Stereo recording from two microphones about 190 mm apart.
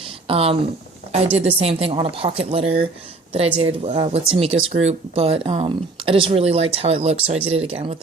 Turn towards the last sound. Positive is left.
turn(degrees=-30)  # may be behind; listen again after turning